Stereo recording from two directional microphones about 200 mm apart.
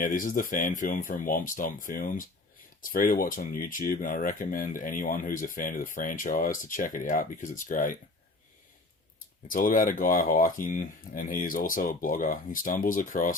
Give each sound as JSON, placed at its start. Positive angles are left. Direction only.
{"t": 0.0, "sound": "speech", "side_deg": 40}
{"t": 9.5, "sound": "speech", "side_deg": 45}